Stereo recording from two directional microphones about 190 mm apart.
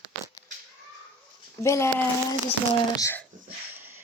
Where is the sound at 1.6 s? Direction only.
15° left (ahead or behind).